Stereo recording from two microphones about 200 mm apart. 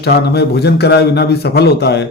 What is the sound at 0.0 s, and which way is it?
A man's voice, 55° left (ahead or behind).